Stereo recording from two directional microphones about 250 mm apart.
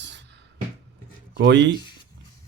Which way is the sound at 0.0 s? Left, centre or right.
Right.